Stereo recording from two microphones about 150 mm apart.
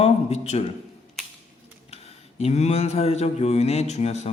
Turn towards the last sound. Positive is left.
turn(degrees=45)  # may be behind; listen again after turning